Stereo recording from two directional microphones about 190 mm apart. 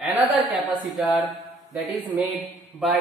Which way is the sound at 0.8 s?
Centre (ahead or behind).